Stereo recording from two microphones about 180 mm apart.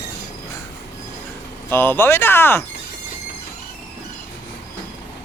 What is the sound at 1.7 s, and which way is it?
Speech, 10° left (ahead or behind).